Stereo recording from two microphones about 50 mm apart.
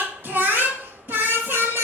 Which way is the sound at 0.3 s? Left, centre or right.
Right.